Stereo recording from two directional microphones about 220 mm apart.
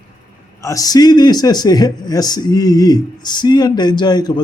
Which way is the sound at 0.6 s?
15° left (ahead or behind).